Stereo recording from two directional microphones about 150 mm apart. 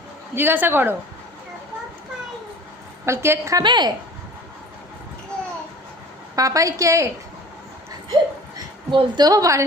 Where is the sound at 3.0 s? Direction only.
15° right (ahead or behind).